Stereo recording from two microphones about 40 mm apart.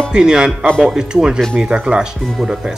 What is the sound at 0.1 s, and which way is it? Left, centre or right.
Speech, centre.